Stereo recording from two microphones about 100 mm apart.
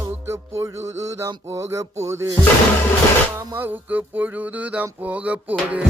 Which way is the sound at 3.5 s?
20° right (ahead or behind).